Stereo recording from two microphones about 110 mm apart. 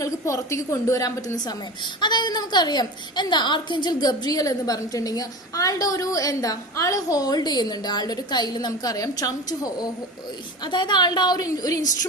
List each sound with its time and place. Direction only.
0.0 s a woman's voice: 30° left (ahead or behind)
10.6 s a woman's voice: 40° left (ahead or behind)